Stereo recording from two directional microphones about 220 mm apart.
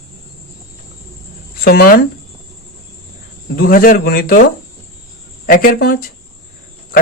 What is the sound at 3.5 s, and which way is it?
Speech, 40° left (ahead or behind).